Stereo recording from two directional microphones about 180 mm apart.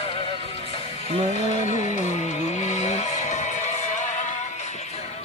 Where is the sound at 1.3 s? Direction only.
40° left (ahead or behind).